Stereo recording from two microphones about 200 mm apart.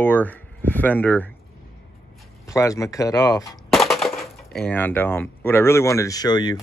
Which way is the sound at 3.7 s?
Centre (ahead or behind).